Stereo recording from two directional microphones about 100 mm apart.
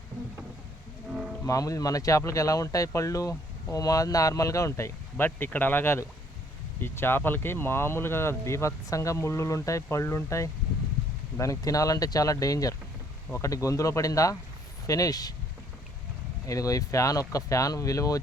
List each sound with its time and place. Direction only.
1.5 s speech: 35° left (ahead or behind)
5.1 s speech: 20° left (ahead or behind); by 15.3 s 40° left (ahead or behind)
16.5 s speech: 35° left (ahead or behind)